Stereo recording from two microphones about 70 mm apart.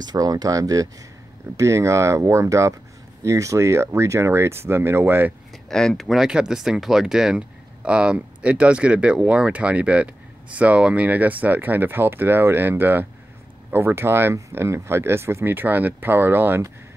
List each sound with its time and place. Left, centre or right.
0.0 s speech: right
1.6 s speech: right
5.7 s speech: centre; by 15.4 s right
15.4 s speech: right